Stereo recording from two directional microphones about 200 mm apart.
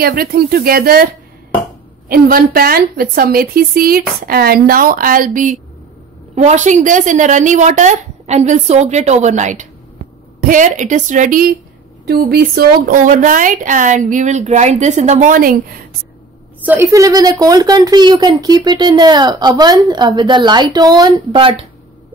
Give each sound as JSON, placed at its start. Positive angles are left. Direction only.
{"t": 0.0, "sound": "speech", "side_deg": -50}
{"t": 2.0, "sound": "a woman's voice", "side_deg": -45}
{"t": 16.6, "sound": "a woman's voice", "side_deg": -10}